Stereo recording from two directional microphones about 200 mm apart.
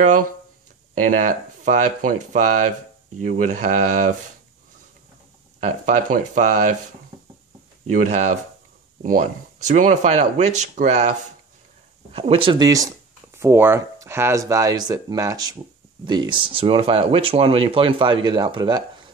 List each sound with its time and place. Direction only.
0.0 s speech: 40° right (ahead or behind)
5.6 s speech: 40° right (ahead or behind)
7.9 s speech: 35° right (ahead or behind); by 18.9 s 20° right (ahead or behind)